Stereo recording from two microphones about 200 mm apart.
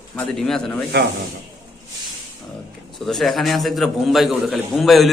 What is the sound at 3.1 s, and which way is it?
A man's voice, centre (ahead or behind).